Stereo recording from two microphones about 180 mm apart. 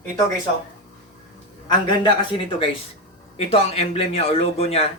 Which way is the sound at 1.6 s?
25° left (ahead or behind).